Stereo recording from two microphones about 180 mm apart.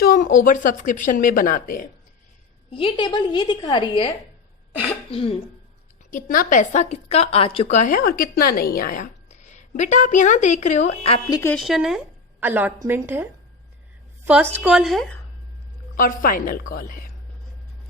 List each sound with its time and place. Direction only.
0.0 s a woman's voice: 50° left (ahead or behind)
2.6 s a woman's voice: 30° left (ahead or behind)
6.1 s a woman's voice: 50° left (ahead or behind); by 11.3 s 30° left (ahead or behind)
11.5 s a woman's voice: centre (ahead or behind)
14.5 s speech: 5° right (ahead or behind)
16.0 s a woman's voice: 50° left (ahead or behind)